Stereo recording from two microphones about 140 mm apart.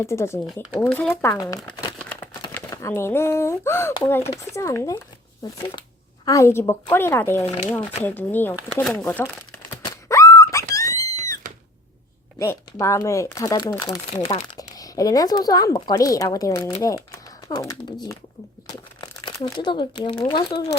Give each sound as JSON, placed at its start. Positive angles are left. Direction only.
{"t": 0.0, "sound": "speech", "side_deg": 20}
{"t": 1.3, "sound": "speech", "side_deg": 25}
{"t": 2.0, "sound": "a sound", "side_deg": 10}
{"t": 2.5, "sound": "speech", "side_deg": 15}
{"t": 7.4, "sound": "speech", "side_deg": 50}
{"t": 8.0, "sound": "speech", "side_deg": 15}
{"t": 9.6, "sound": "a sound", "side_deg": 25}
{"t": 12.4, "sound": "speech", "side_deg": 20}
{"t": 16.8, "sound": "typing", "side_deg": 25}
{"t": 18.7, "sound": "speech", "side_deg": 30}